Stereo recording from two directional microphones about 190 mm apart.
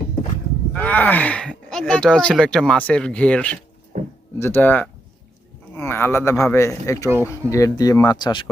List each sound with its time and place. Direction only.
0.7 s speech: 10° left (ahead or behind)
3.9 s a sound: 40° right (ahead or behind)
4.4 s speech: 10° left (ahead or behind)
6.3 s a man's voice: 5° left (ahead or behind)
6.6 s speech: 15° left (ahead or behind)